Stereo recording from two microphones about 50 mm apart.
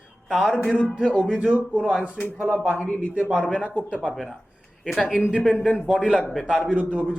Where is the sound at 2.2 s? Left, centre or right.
Left.